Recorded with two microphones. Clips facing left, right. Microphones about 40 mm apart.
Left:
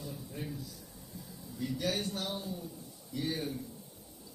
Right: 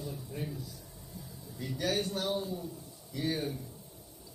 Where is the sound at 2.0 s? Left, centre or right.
Right.